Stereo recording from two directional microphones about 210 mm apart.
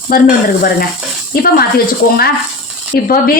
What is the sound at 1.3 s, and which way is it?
Speech, 45° left (ahead or behind).